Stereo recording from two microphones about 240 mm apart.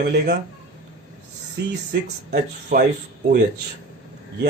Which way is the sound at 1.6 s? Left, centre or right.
Right.